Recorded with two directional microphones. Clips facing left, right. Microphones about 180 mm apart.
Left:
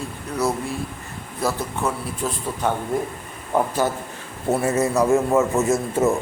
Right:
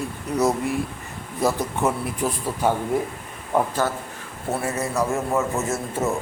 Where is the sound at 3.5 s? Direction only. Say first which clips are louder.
Left 1 dB; centre (ahead or behind).